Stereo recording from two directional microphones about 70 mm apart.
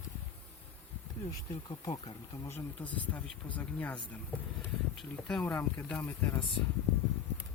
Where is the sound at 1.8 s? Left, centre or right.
Left.